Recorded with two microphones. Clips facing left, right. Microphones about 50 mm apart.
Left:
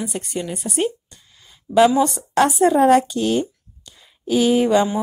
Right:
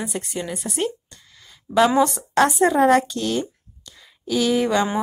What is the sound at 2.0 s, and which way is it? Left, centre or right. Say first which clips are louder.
Speech: even; centre.